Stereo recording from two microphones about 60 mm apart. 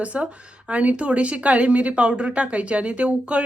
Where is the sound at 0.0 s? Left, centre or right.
Right.